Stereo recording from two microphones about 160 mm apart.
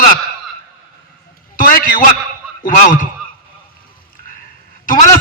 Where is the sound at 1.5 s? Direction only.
60° left (ahead or behind).